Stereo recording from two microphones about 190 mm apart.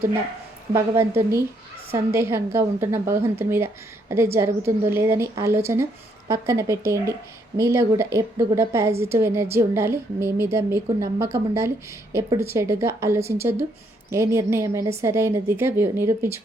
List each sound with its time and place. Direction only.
0.7 s speech: 15° right (ahead or behind)